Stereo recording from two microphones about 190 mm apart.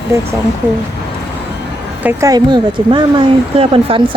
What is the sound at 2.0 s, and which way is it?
Speech, 20° right (ahead or behind).